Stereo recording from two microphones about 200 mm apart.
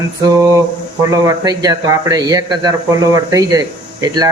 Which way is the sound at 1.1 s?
20° right (ahead or behind).